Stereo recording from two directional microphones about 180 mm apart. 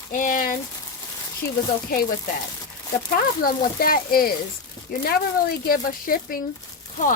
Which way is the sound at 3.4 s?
55° left (ahead or behind).